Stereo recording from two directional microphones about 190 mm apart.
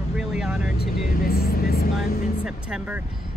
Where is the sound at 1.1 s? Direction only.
50° left (ahead or behind).